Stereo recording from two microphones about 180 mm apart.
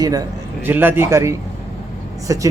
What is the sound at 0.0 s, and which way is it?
Speech, 20° right (ahead or behind).